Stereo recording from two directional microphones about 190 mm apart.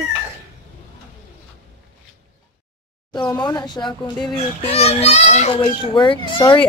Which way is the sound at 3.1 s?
25° left (ahead or behind).